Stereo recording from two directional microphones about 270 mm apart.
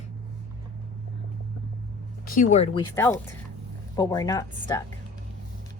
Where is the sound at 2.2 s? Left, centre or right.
Left.